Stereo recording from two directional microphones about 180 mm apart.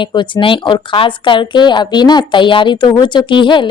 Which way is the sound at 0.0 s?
25° left (ahead or behind).